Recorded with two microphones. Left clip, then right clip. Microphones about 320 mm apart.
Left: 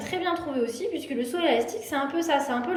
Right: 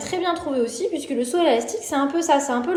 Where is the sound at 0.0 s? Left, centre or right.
Centre.